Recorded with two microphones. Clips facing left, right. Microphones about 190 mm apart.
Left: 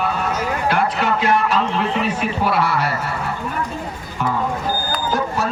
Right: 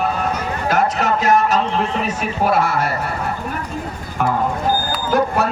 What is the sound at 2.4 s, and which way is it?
Speech, 45° right (ahead or behind).